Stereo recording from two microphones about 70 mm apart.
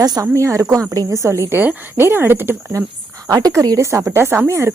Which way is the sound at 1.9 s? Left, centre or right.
Right.